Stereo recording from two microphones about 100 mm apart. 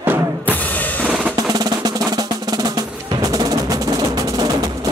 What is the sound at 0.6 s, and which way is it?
Music, 15° left (ahead or behind).